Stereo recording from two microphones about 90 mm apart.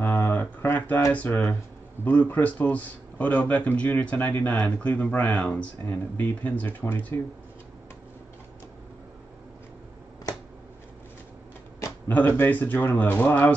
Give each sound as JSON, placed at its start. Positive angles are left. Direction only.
{"t": 0.0, "sound": "a sound", "side_deg": 20}
{"t": 1.1, "sound": "a man's voice", "side_deg": 20}
{"t": 12.1, "sound": "a man's voice", "side_deg": 20}